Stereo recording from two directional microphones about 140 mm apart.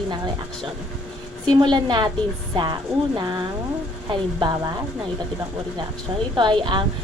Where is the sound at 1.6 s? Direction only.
30° right (ahead or behind).